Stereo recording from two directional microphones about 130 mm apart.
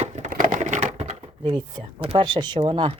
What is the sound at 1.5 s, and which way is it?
Speech, 45° right (ahead or behind).